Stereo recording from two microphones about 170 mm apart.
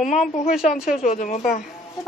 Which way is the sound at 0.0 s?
45° left (ahead or behind).